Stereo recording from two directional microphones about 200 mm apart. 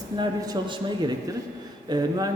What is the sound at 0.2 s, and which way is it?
A man's voice, 20° right (ahead or behind).